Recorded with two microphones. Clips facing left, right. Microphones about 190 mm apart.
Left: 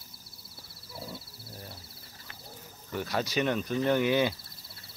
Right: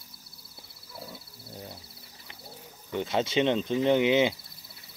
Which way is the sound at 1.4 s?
25° right (ahead or behind).